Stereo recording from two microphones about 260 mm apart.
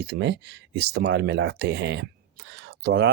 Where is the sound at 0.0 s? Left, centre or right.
Right.